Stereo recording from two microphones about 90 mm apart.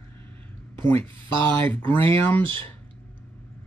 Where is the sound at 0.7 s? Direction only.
20° left (ahead or behind).